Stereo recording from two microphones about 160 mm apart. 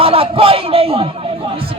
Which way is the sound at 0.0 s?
35° right (ahead or behind).